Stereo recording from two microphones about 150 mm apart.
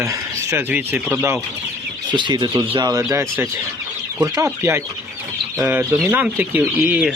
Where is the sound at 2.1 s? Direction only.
30° right (ahead or behind).